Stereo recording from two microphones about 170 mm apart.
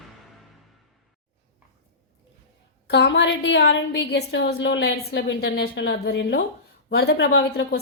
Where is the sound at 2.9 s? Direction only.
90° left.